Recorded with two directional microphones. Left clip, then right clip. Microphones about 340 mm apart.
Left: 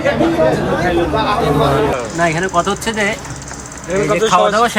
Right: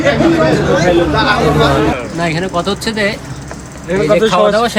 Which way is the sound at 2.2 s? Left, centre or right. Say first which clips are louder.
Left 3 dB; centre.